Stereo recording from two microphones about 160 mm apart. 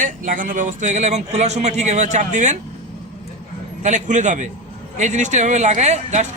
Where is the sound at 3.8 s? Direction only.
50° right (ahead or behind).